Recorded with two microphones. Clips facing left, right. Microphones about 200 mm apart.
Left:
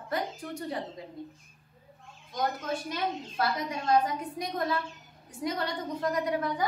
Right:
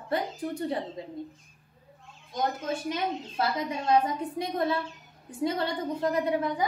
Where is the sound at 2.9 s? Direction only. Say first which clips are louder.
Right 2 dB; 25° right (ahead or behind).